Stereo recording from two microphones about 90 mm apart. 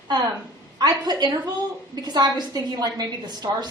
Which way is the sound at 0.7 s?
50° right (ahead or behind).